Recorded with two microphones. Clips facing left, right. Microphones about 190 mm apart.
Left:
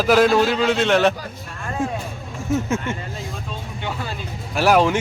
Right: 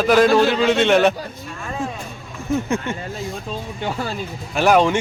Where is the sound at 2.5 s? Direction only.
5° left (ahead or behind).